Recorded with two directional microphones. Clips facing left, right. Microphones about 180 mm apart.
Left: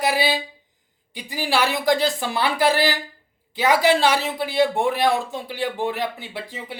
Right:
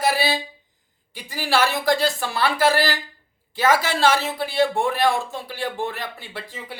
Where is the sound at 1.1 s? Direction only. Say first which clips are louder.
Right 1 dB; 20° left (ahead or behind).